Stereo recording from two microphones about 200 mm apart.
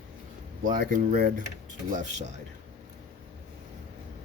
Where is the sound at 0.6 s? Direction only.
45° right (ahead or behind).